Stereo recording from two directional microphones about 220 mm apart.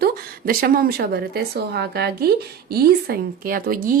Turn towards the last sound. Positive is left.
turn(degrees=-40)  # may be behind; listen again after turning